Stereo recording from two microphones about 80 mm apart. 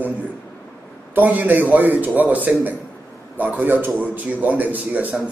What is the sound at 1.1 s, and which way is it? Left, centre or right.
A man's voice, right.